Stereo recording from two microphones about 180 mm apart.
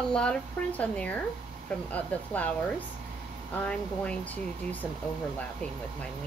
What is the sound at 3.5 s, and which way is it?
Speech, 5° left (ahead or behind).